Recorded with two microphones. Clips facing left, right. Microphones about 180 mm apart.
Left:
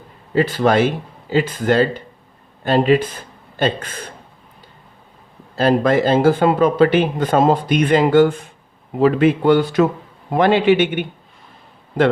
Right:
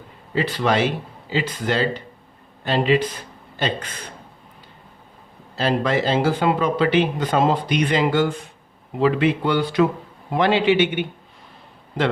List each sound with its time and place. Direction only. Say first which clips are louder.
0.3 s speech: left 5 dB; 45° left (ahead or behind)
5.5 s speech: left 6 dB; 50° left (ahead or behind)